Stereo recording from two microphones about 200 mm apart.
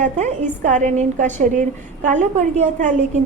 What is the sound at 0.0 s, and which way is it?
A woman's voice, 35° right (ahead or behind).